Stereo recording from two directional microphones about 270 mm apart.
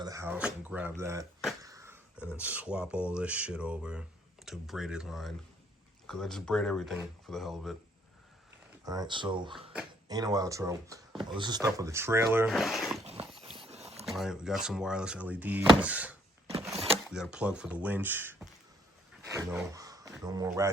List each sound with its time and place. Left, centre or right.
0.0 s speech: centre
1.6 s a sound: centre
2.4 s speech: centre
8.8 s speech: centre
13.1 s a sound: right
13.6 s boat: right
14.0 s speech: centre
16.5 s a sound: right
17.1 s speech: centre